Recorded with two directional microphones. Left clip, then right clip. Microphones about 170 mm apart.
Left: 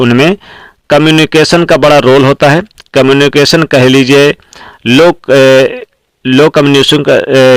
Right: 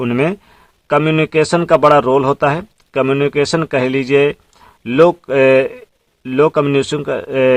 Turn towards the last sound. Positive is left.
turn(degrees=45)  # may be behind; listen again after turning